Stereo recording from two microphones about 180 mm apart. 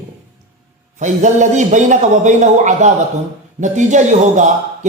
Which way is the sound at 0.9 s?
45° right (ahead or behind).